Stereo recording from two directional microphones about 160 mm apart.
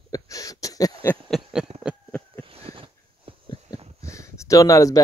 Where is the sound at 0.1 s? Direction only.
20° left (ahead or behind).